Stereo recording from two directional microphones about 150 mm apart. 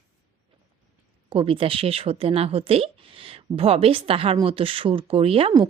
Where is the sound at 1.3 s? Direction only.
40° right (ahead or behind).